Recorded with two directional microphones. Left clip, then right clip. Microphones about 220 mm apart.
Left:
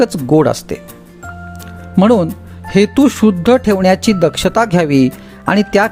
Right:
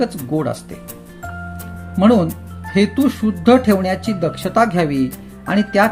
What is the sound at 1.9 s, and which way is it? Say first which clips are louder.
Speech: left 3 dB; 50° left (ahead or behind).